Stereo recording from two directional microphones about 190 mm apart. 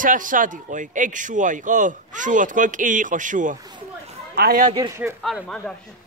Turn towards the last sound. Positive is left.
turn(degrees=5)  # may be behind; listen again after turning